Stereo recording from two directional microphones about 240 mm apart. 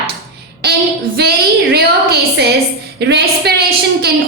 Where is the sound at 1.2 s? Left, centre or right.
Right.